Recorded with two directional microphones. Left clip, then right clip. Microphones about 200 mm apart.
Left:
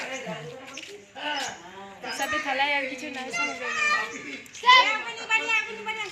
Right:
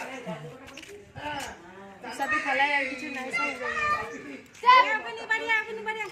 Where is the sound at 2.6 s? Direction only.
15° left (ahead or behind).